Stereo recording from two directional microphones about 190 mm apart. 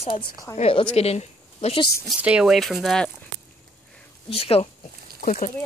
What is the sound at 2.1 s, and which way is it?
Speech, 5° right (ahead or behind).